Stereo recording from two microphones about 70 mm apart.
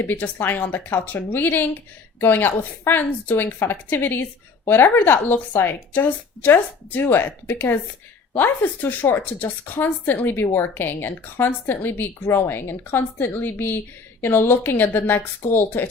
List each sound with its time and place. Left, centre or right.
0.0 s a woman's voice: left